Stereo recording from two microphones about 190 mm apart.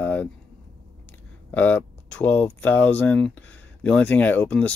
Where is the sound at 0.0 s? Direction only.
10° left (ahead or behind).